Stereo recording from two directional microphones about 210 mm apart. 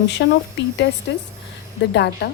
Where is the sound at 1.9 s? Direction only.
55° left (ahead or behind).